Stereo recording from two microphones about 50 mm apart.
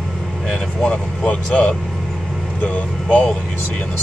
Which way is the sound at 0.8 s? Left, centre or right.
Left.